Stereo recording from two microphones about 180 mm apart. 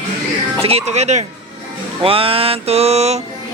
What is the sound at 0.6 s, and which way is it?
Music, 35° right (ahead or behind).